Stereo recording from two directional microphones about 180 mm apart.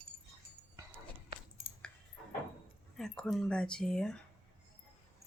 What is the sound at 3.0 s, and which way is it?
Speech, 5° left (ahead or behind).